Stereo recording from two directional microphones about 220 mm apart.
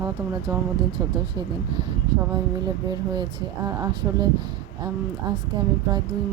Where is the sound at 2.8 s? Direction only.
20° right (ahead or behind).